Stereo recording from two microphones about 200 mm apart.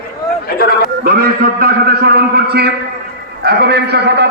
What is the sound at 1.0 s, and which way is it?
A man's voice, 45° right (ahead or behind).